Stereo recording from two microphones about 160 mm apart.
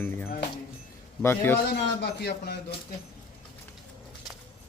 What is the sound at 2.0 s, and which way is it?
Speech, 90° left.